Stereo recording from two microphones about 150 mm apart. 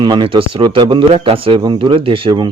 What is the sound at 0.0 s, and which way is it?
A man's voice, 30° right (ahead or behind).